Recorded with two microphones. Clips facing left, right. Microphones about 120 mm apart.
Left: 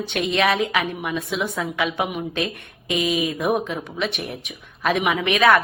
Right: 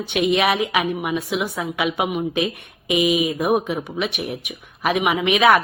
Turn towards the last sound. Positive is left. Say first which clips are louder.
# right 1 dB
turn(degrees=-15)  # may be behind; listen again after turning